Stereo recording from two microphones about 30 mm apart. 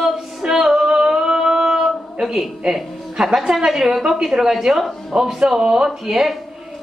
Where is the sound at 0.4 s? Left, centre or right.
Centre.